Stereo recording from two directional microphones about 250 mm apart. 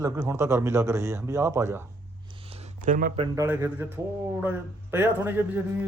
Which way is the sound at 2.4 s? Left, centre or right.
Right.